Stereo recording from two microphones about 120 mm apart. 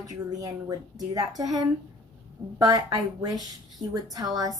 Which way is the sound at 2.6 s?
30° right (ahead or behind).